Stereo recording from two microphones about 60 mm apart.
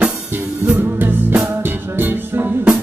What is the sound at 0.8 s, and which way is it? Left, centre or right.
Music, right.